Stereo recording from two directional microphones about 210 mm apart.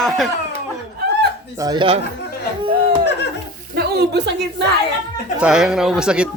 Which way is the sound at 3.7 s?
50° right (ahead or behind).